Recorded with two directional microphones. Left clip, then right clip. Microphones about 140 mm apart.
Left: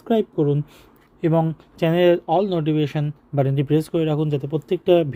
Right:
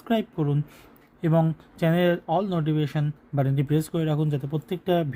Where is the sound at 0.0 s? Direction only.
25° left (ahead or behind).